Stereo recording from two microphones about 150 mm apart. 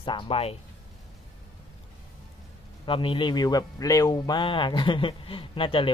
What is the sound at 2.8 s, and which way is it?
Speech, 35° left (ahead or behind).